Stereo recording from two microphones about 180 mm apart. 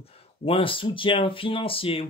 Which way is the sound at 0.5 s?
30° left (ahead or behind).